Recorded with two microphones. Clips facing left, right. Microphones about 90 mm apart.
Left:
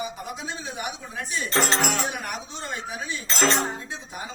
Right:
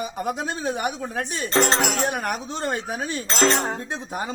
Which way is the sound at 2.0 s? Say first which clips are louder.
Right 6 dB; 50° right (ahead or behind).